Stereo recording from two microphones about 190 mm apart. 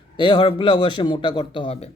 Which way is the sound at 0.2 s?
25° left (ahead or behind).